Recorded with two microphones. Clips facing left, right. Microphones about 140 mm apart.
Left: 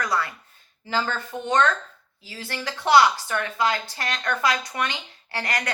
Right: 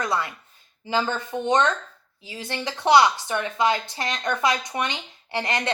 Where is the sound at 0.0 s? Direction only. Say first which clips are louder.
Even; 20° right (ahead or behind).